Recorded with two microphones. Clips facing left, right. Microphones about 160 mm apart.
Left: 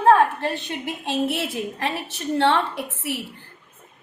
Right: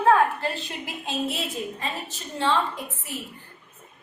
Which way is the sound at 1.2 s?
75° left (ahead or behind).